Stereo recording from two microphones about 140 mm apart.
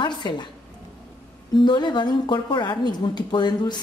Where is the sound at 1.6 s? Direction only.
30° left (ahead or behind).